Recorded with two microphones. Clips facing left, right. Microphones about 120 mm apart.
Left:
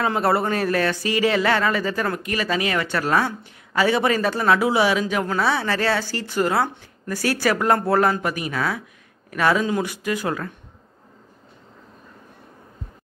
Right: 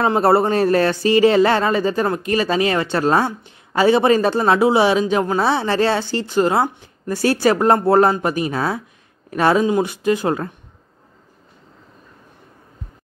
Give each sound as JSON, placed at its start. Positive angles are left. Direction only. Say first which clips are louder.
{"t": 0.0, "sound": "speech", "louder": "right 5 dB", "side_deg": -30}